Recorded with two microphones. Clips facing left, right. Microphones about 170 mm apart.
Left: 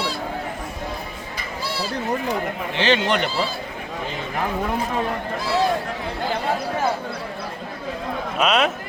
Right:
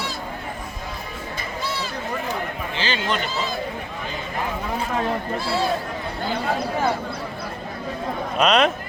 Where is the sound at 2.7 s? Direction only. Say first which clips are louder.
Left 6 dB; 70° left (ahead or behind).